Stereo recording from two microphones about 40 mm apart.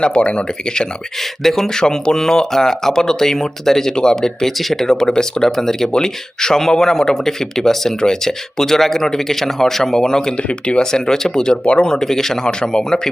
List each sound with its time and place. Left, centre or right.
0.0 s speech: left
1.4 s speech: centre
11.6 s speech: left
11.9 s speech: centre